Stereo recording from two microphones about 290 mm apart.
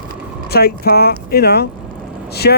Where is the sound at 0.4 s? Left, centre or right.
Left.